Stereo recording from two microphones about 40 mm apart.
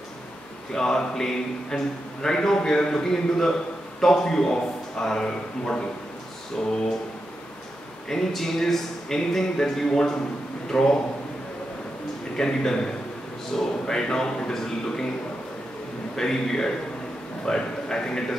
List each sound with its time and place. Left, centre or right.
0.7 s speech: centre
8.1 s speech: centre
12.4 s speech: centre
16.2 s speech: centre